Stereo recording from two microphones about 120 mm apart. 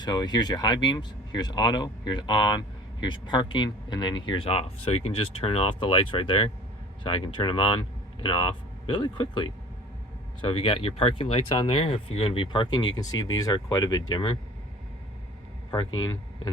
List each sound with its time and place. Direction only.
0.0 s speech: 35° left (ahead or behind)
12.7 s speech: 35° left (ahead or behind)
15.7 s speech: 35° left (ahead or behind)